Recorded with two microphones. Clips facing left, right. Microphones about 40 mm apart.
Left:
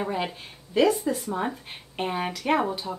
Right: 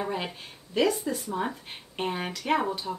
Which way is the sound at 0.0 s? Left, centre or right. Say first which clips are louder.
Left 3 dB; centre.